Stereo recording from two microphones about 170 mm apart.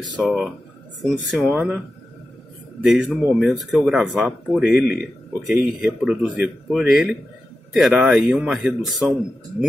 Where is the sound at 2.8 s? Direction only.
Centre (ahead or behind).